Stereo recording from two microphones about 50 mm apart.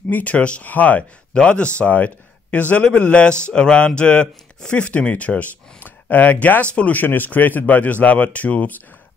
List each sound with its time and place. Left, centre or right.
0.1 s speech: left
1.3 s speech: left